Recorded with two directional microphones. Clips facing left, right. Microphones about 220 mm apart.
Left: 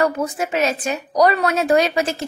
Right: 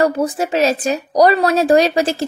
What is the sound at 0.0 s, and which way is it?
A woman's voice, 35° right (ahead or behind).